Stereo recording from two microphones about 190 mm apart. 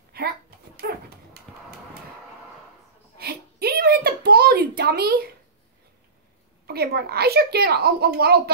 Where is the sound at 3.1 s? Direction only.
55° right (ahead or behind).